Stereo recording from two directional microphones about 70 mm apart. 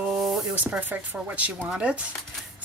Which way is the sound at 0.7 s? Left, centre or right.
Right.